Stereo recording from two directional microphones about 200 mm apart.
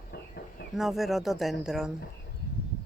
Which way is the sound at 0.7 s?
Centre (ahead or behind).